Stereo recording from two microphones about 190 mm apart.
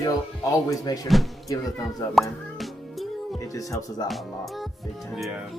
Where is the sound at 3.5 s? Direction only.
15° left (ahead or behind).